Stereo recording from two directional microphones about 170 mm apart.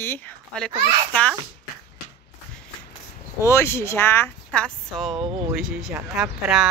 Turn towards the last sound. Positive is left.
turn(degrees=0)  # may be behind; listen again after turning